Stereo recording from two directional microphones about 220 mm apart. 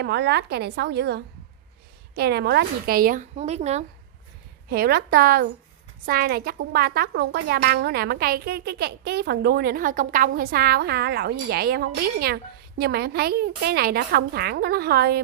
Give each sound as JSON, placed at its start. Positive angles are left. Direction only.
{"t": 0.0, "sound": "a woman's voice", "side_deg": -50}
{"t": 4.6, "sound": "a woman's voice", "side_deg": -45}